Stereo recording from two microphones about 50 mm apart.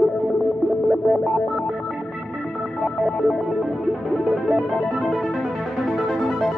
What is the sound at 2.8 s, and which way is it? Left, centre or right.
Music, centre.